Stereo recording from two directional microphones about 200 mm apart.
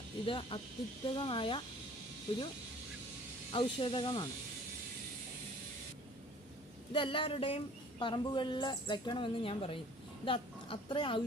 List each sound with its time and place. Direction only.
0.3 s speech: 25° left (ahead or behind)
3.5 s speech: 25° left (ahead or behind)
6.9 s speech: 25° left (ahead or behind)